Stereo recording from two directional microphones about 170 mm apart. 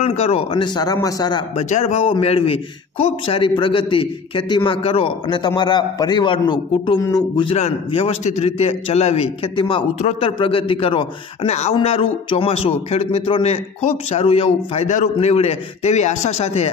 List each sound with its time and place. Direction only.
0.0 s a man's voice: 40° left (ahead or behind)
1.7 s a man's voice: 40° left (ahead or behind); by 7.5 s 25° left (ahead or behind)
7.5 s a man's voice: 40° left (ahead or behind)